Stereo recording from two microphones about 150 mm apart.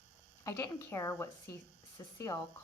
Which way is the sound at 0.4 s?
15° left (ahead or behind).